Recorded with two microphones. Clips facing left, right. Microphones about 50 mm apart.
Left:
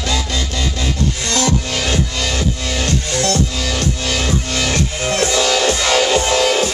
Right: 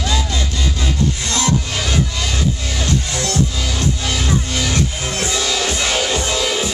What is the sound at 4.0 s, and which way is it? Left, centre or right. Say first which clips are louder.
Music: left 1 dB; left.